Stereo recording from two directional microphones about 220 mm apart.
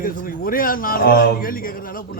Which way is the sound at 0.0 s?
40° left (ahead or behind).